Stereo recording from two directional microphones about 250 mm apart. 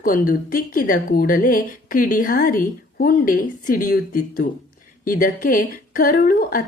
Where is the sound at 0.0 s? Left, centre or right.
Left.